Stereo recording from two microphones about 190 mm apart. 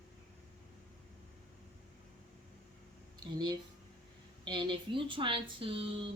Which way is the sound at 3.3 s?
20° right (ahead or behind).